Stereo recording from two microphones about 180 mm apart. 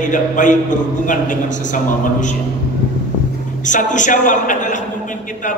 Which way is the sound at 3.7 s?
45° left (ahead or behind).